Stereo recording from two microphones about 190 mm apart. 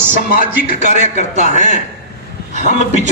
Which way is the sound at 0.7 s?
40° left (ahead or behind).